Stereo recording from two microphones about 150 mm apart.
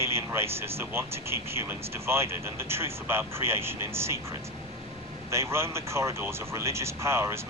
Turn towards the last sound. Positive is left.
turn(degrees=-20)  # may be behind; listen again after turning